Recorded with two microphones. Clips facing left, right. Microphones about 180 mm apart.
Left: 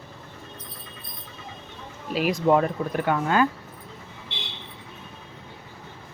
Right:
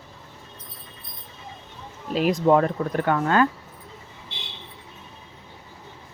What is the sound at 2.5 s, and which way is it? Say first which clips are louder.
Speech: right 1 dB; 10° left (ahead or behind).